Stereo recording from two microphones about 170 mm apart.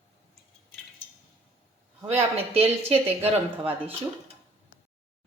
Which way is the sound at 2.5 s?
35° right (ahead or behind).